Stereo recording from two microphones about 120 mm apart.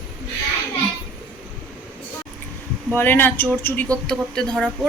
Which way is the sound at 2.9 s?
15° left (ahead or behind).